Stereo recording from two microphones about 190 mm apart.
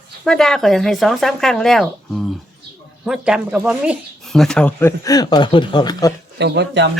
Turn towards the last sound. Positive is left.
turn(degrees=-65)  # may be behind; listen again after turning